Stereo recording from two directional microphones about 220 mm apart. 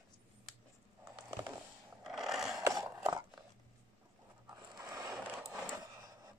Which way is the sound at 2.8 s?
15° right (ahead or behind).